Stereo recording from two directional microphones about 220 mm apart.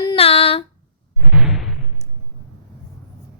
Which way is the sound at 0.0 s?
25° left (ahead or behind).